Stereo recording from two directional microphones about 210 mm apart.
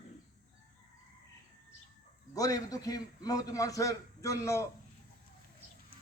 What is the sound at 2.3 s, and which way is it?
A man's voice, 15° left (ahead or behind).